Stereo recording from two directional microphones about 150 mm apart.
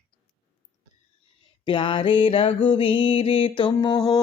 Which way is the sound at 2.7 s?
35° left (ahead or behind).